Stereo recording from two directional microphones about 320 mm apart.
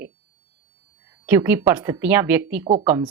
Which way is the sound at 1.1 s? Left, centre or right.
Centre.